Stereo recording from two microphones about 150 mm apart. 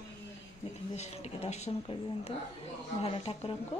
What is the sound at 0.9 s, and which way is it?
Speech, 45° left (ahead or behind).